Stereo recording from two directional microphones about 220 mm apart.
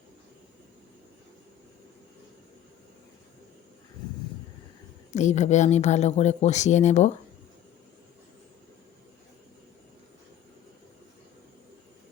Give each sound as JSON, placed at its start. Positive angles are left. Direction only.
{"t": 5.1, "sound": "speech", "side_deg": 30}